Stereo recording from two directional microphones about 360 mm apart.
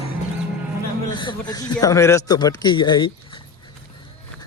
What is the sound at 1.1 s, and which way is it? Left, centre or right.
A man's voice, centre.